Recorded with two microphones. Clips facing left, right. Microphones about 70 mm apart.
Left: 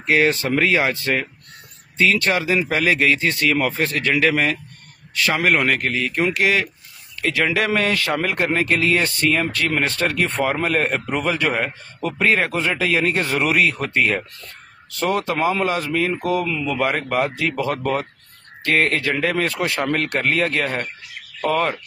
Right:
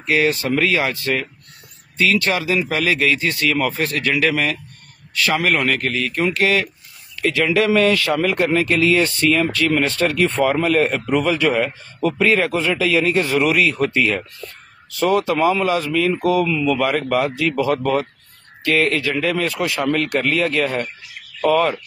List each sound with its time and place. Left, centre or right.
0.0 s a man's voice: left
19.4 s speech: left